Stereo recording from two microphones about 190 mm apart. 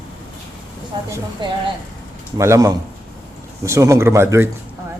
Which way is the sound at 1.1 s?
15° right (ahead or behind).